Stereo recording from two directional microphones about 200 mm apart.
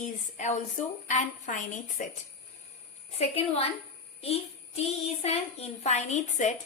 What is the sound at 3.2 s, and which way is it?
Speech, 30° left (ahead or behind).